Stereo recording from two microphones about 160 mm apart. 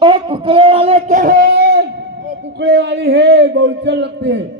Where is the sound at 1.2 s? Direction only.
65° right (ahead or behind).